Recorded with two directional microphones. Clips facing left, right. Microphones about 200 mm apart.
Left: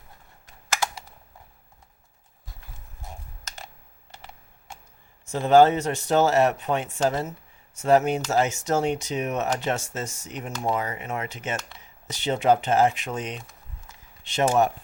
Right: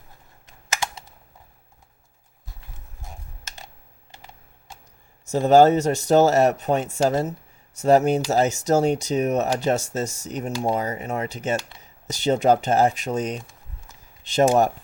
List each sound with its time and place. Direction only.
5.3 s speech: 40° right (ahead or behind)